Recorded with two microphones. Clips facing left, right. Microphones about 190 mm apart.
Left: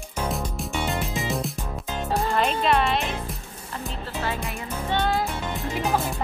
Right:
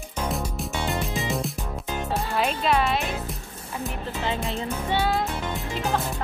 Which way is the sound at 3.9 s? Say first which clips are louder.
Even; 20° right (ahead or behind).